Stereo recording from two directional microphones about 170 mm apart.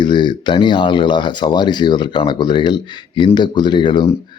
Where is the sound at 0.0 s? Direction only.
25° left (ahead or behind).